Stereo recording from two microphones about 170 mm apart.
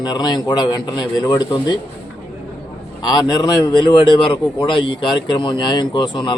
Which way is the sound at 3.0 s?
25° left (ahead or behind).